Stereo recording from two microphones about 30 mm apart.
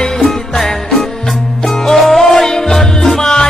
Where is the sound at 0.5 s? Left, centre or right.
Centre.